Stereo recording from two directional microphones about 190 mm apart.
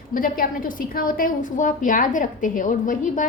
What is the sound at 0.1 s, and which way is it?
A woman's voice, 45° left (ahead or behind).